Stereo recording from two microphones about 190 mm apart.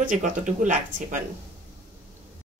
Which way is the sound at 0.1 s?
45° right (ahead or behind).